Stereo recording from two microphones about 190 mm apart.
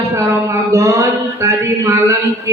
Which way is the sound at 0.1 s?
15° right (ahead or behind).